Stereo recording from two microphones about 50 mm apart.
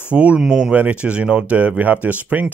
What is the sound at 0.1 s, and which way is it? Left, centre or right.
Speech, right.